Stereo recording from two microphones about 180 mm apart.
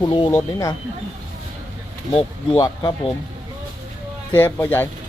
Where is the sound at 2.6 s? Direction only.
25° left (ahead or behind).